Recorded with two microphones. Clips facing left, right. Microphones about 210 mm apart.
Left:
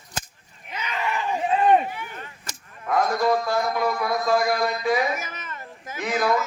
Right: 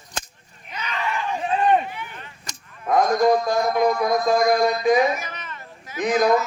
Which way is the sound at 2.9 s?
15° right (ahead or behind).